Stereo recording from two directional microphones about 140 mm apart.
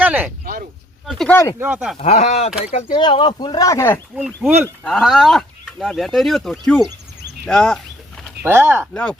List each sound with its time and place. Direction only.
0.0 s a sound: 10° right (ahead or behind)
0.4 s a sound: 90° right
1.3 s speech: 20° left (ahead or behind)
1.5 s speech: 10° right (ahead or behind)
2.0 s speech: 50° left (ahead or behind)
2.7 s speech: 35° left (ahead or behind); by 4.0 s 15° left (ahead or behind)
4.4 s speech: 15° right (ahead or behind)
4.8 s speech: 5° left (ahead or behind)
8.4 s speech: 15° right (ahead or behind)
8.9 s speech: 5° left (ahead or behind)